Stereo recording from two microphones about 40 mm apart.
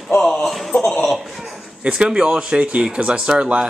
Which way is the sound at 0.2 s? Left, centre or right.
Centre.